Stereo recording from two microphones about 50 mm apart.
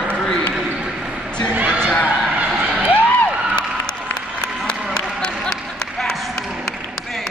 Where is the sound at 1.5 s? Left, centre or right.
Right.